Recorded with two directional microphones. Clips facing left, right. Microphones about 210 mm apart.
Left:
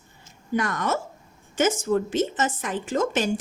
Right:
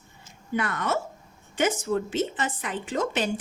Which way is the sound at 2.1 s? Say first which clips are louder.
Left 3 dB; 45° left (ahead or behind).